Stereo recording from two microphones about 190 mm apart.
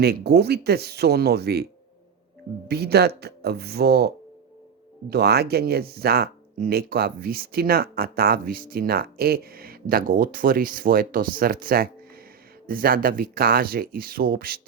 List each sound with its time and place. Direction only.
0.0 s speech: 60° right (ahead or behind)
2.6 s speech: 60° right (ahead or behind)